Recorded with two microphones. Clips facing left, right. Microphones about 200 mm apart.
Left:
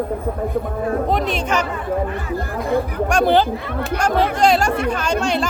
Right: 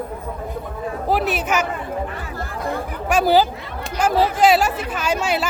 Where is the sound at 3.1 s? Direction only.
5° right (ahead or behind).